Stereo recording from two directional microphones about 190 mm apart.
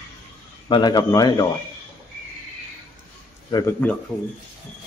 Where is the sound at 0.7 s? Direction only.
25° left (ahead or behind).